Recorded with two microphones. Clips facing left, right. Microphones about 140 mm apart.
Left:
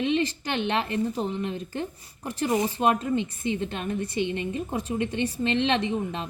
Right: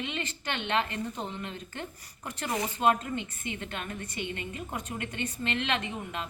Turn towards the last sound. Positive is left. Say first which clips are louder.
# left 8 dB
turn(degrees=30)  # may be behind; listen again after turning